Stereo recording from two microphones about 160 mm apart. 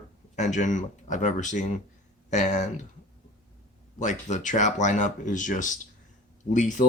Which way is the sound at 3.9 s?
50° left (ahead or behind).